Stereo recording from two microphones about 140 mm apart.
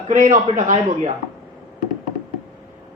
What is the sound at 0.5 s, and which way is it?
Speech, 60° right (ahead or behind).